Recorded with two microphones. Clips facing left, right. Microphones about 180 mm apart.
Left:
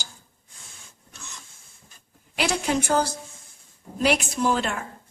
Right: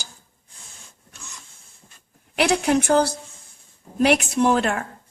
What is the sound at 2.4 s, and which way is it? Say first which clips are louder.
A woman's voice: right 5 dB; 65° right (ahead or behind).